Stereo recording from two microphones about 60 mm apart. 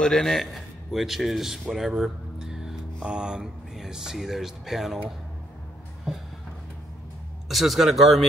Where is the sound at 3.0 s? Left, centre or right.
Centre.